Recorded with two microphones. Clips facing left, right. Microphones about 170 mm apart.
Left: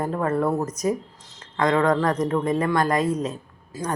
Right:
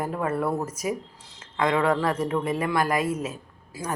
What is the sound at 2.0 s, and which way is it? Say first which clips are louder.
Speech: left 3 dB; 10° right (ahead or behind).